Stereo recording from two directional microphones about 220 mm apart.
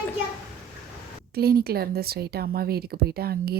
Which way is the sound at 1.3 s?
45° right (ahead or behind).